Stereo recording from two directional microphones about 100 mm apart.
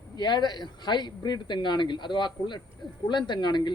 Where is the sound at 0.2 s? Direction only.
45° left (ahead or behind).